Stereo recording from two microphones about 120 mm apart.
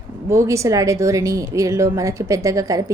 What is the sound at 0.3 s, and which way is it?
A woman's voice, 25° right (ahead or behind).